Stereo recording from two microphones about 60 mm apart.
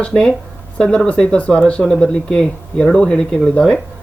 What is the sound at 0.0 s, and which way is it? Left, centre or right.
Speech, centre.